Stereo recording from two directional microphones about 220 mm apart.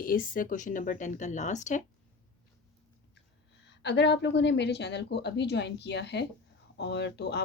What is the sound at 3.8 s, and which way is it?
Speech, 50° left (ahead or behind).